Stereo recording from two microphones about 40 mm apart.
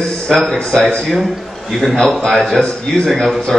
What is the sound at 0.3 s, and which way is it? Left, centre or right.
Speech, centre.